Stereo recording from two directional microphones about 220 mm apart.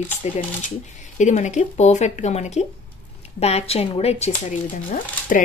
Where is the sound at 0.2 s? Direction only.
30° left (ahead or behind).